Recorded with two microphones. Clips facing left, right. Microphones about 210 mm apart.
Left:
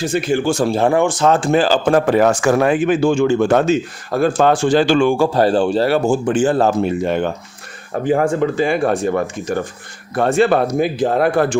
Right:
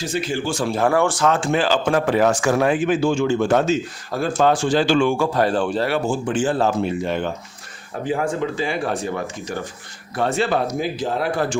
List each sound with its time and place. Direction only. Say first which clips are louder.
0.0 s speech: left 6 dB; 55° left (ahead or behind)
0.7 s speech: right 1 dB; 25° left (ahead or behind)
1.3 s a man's voice: left 5 dB; 40° left (ahead or behind); by 11.5 s 55° left (ahead or behind)